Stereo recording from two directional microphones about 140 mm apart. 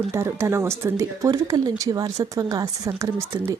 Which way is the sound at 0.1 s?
20° right (ahead or behind).